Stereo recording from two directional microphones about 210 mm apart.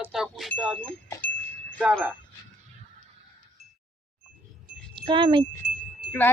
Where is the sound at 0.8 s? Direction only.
5° left (ahead or behind).